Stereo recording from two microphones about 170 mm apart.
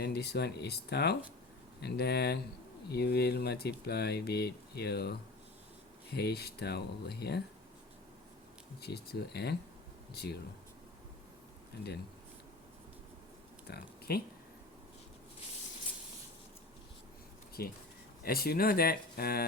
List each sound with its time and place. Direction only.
0.0 s speech: 70° left (ahead or behind)
6.1 s speech: 70° left (ahead or behind)
8.8 s speech: 70° left (ahead or behind)
13.7 s speech: 70° left (ahead or behind)
17.6 s speech: 65° left (ahead or behind)